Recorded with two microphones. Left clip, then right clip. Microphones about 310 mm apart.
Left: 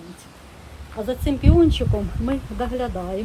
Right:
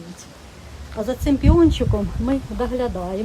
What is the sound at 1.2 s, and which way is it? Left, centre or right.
Speech, right.